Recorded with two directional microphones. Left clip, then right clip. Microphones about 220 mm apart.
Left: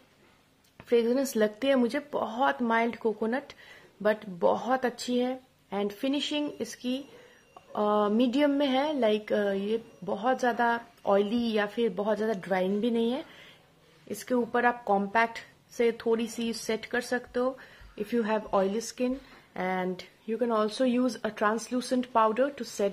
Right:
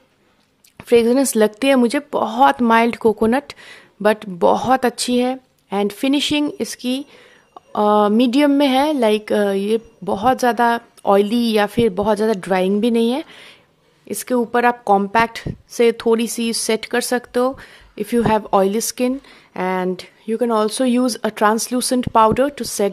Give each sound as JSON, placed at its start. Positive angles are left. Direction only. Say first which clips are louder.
{"t": 0.7, "sound": "a woman's voice", "louder": "right 11 dB", "side_deg": -40}